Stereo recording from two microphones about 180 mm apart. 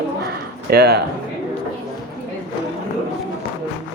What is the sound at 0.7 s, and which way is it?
Speech, 65° right (ahead or behind).